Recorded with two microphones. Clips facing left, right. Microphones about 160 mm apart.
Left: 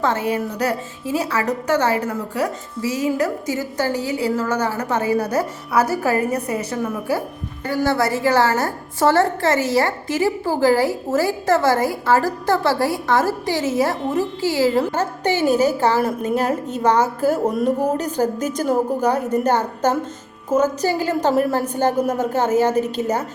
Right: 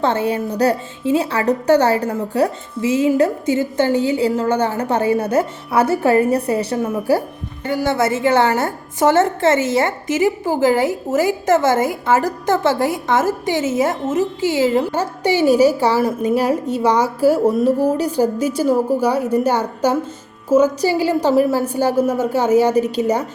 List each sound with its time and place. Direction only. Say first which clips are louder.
0.0 s a woman's voice: right 2 dB; 30° right (ahead or behind)
7.9 s a woman's voice: right 2 dB; 20° right (ahead or behind)
21.0 s a woman's voice: right 4 dB; 10° right (ahead or behind)